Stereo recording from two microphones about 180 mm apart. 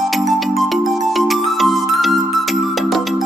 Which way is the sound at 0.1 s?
Centre (ahead or behind).